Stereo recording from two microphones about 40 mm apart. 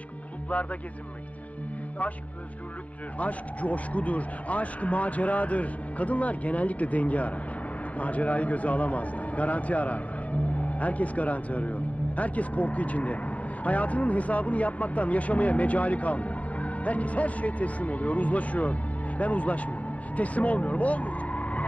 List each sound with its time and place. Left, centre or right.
0.5 s speech: left
3.2 s speech: left